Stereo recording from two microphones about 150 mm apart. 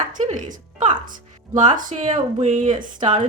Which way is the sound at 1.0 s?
65° right (ahead or behind).